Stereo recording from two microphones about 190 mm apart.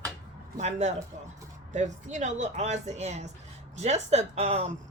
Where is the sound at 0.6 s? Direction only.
35° right (ahead or behind).